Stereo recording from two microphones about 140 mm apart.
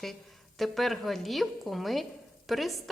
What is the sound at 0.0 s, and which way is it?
A woman's voice, centre (ahead or behind).